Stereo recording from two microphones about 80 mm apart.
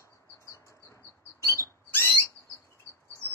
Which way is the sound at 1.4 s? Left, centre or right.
Left.